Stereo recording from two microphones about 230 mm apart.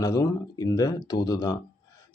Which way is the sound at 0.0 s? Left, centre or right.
Centre.